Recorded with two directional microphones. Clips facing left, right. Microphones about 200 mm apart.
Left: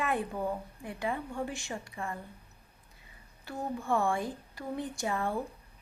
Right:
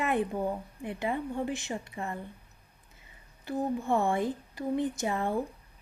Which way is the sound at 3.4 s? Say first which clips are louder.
Right 6 dB; 20° right (ahead or behind).